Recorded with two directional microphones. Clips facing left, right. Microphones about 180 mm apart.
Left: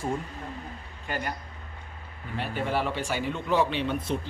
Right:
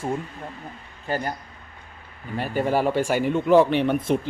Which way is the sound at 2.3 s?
40° right (ahead or behind).